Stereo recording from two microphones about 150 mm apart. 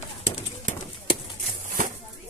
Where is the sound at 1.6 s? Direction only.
60° right (ahead or behind).